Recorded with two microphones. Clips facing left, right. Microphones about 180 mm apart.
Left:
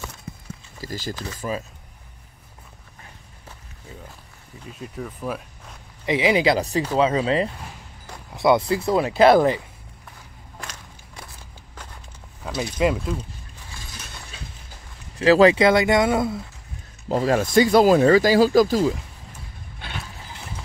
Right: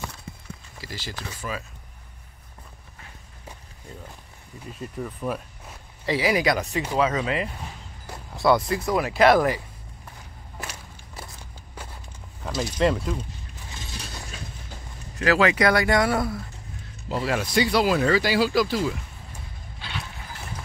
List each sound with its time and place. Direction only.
0.7 s speech: 45° left (ahead or behind)
4.6 s speech: centre (ahead or behind)
6.0 s speech: 20° left (ahead or behind)
10.6 s walk: 5° right (ahead or behind)
12.4 s speech: 5° left (ahead or behind)
13.7 s mechanisms: 25° right (ahead or behind)
15.1 s speech: 30° left (ahead or behind)
17.1 s speech: 45° left (ahead or behind)
19.8 s a sound: 55° left (ahead or behind)